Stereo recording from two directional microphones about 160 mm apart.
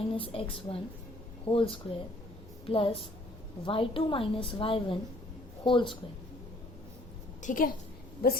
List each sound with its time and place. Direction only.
0.1 s a woman's voice: 35° left (ahead or behind)
7.4 s a woman's voice: 60° left (ahead or behind)